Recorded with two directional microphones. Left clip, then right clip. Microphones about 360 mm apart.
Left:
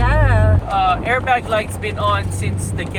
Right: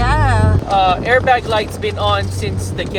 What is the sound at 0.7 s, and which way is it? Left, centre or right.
Speech, right.